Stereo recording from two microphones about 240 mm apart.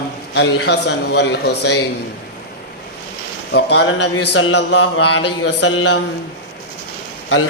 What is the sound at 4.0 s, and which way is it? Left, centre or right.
Mantra, left.